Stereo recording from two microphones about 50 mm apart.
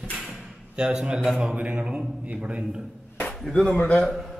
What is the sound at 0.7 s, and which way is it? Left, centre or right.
A man's voice, centre.